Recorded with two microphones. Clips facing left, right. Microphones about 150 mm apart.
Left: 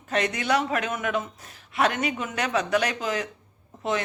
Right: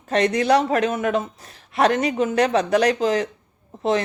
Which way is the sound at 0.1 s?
35° right (ahead or behind).